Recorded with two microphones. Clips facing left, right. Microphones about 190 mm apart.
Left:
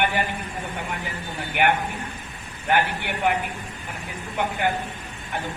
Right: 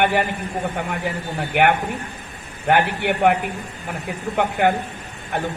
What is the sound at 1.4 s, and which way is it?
A man's voice, 55° right (ahead or behind).